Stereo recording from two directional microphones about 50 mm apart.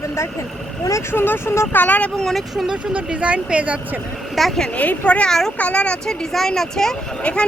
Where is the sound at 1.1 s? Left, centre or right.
Left.